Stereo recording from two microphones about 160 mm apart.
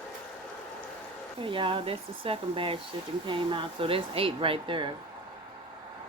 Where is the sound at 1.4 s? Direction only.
35° right (ahead or behind).